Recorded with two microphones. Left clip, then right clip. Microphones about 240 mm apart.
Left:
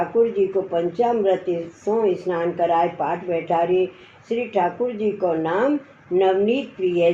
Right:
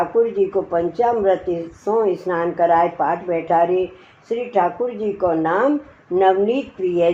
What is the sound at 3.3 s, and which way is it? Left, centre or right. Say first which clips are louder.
Speech: right 2 dB; right.